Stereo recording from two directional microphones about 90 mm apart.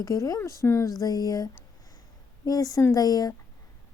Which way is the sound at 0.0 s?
45° left (ahead or behind).